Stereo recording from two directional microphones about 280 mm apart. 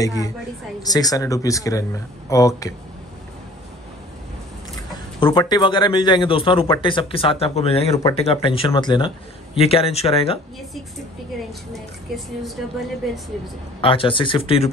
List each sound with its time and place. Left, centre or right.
0.0 s speech: centre
5.2 s speech: centre
13.7 s speech: centre